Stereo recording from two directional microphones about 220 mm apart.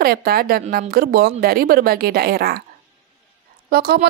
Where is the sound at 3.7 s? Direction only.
45° right (ahead or behind).